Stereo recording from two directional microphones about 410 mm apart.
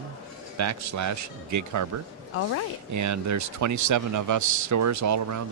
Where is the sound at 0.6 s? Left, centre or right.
Right.